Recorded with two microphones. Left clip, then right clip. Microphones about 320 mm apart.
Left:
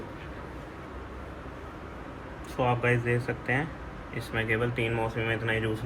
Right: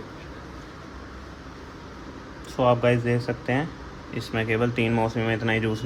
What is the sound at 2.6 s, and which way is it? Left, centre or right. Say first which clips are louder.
Speech: right 6 dB; right.